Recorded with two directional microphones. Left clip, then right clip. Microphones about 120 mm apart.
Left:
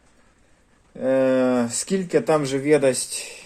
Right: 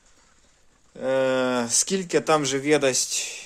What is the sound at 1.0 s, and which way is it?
Speech, 20° right (ahead or behind).